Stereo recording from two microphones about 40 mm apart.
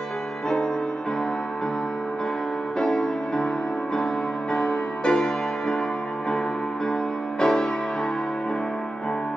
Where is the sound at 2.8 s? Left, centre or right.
Centre.